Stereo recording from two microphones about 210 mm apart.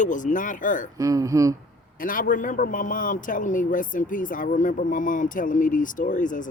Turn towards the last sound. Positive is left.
turn(degrees=40)  # may be behind; listen again after turning